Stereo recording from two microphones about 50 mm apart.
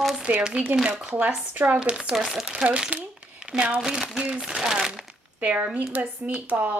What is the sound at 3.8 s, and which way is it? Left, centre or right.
Speech, centre.